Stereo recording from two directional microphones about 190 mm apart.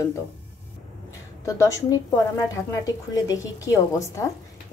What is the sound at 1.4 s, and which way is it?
A woman's voice, 15° left (ahead or behind).